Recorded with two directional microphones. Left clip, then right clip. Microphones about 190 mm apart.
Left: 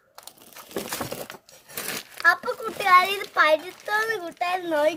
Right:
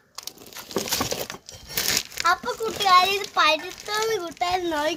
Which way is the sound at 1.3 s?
10° right (ahead or behind).